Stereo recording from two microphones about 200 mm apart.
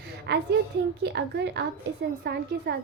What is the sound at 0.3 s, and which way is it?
A woman's voice, 55° right (ahead or behind).